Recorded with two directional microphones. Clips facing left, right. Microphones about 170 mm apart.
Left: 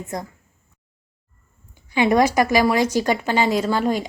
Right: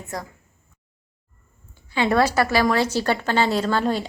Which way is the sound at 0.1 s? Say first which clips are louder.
Left 2 dB; 20° left (ahead or behind).